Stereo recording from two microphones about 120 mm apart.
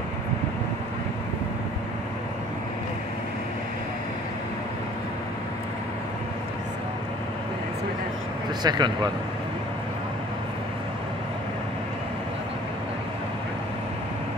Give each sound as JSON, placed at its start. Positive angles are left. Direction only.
{"t": 8.6, "sound": "speech", "side_deg": -35}